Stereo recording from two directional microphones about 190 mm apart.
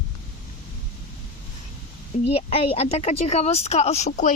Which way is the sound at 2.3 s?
30° left (ahead or behind).